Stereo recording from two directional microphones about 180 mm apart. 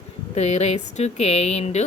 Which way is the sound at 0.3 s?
40° left (ahead or behind).